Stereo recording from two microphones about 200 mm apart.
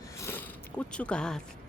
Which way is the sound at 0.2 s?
10° left (ahead or behind).